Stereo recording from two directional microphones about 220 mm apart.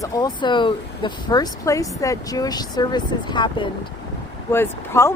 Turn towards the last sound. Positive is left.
turn(degrees=10)  # may be behind; listen again after turning